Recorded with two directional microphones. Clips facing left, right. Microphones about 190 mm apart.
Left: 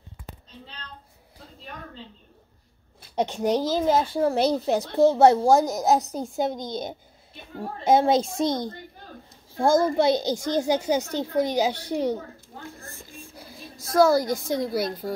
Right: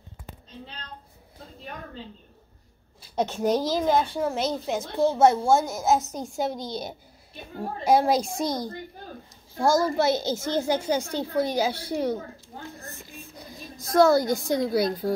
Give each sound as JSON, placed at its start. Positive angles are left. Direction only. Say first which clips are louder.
{"t": 3.2, "sound": "a child's voice", "louder": "even", "side_deg": 15}
{"t": 3.7, "sound": "a child's voice", "louder": "left 1 dB", "side_deg": 35}
{"t": 6.3, "sound": "a child's voice", "louder": "left 1 dB", "side_deg": 20}
{"t": 9.8, "sound": "a child's voice", "louder": "left 2 dB", "side_deg": 20}
{"t": 11.0, "sound": "a woman's voice", "louder": "left 1 dB", "side_deg": -10}
{"t": 11.3, "sound": "a child's voice", "louder": "left 2 dB", "side_deg": 15}
{"t": 13.4, "sound": "a sound", "louder": "right 1 dB", "side_deg": 0}
{"t": 14.5, "sound": "a woman's voice", "louder": "right 3 dB", "side_deg": 0}